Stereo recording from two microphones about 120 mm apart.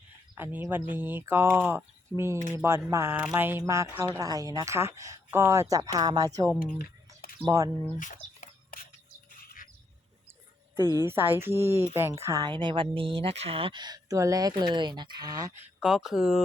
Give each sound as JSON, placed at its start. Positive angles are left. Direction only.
{"t": 0.3, "sound": "speech", "side_deg": -15}
{"t": 7.5, "sound": "speech", "side_deg": -25}
{"t": 7.9, "sound": "speech", "side_deg": 90}
{"t": 10.8, "sound": "a woman's voice", "side_deg": 30}
{"t": 11.0, "sound": "speech", "side_deg": -20}
{"t": 12.5, "sound": "speech", "side_deg": -40}
{"t": 14.6, "sound": "speech", "side_deg": -40}
{"t": 15.8, "sound": "speech", "side_deg": -5}